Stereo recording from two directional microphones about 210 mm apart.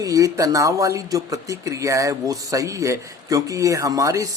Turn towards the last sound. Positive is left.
turn(degrees=-15)  # may be behind; listen again after turning